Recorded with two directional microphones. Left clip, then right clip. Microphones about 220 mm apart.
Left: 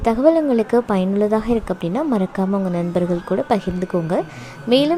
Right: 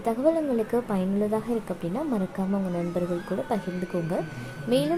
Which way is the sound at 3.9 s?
50° left (ahead or behind).